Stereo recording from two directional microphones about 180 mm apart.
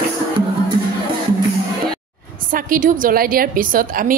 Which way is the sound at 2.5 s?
50° right (ahead or behind).